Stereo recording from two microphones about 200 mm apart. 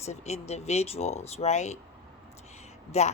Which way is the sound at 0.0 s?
35° left (ahead or behind).